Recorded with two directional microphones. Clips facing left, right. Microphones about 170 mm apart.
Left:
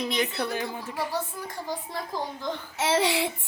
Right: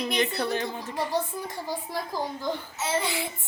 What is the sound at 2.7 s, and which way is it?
Speech, 80° left.